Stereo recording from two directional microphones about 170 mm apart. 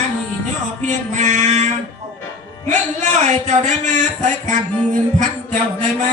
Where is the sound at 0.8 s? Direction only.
45° right (ahead or behind).